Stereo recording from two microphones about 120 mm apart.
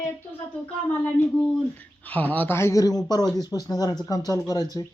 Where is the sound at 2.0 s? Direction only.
15° left (ahead or behind); by 4.8 s 30° left (ahead or behind).